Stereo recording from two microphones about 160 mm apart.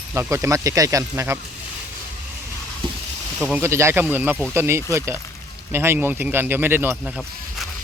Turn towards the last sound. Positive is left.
turn(degrees=-15)  # may be behind; listen again after turning